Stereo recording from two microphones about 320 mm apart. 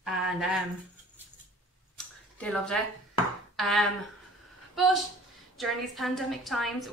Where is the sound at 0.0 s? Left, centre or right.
Centre.